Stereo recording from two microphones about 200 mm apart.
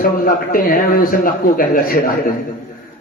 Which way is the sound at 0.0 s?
45° left (ahead or behind).